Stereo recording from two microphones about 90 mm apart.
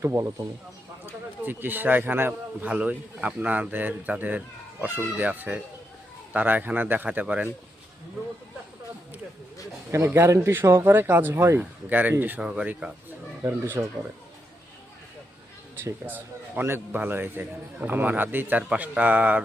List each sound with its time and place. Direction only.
0.0 s speech: 30° right (ahead or behind)
1.0 s a man's voice: 20° right (ahead or behind)
9.9 s a man's voice: 25° right (ahead or behind)
13.4 s a man's voice: 25° right (ahead or behind)
15.8 s a man's voice: 25° right (ahead or behind)